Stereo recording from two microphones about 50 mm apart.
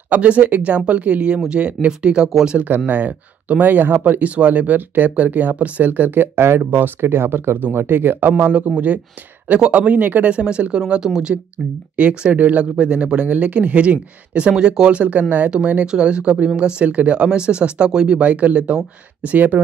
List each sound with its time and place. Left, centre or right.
0.1 s speech: right
2.9 s speech: right
8.5 s speech: right; by 11.4 s centre
12.0 s speech: right
12.7 s speech: right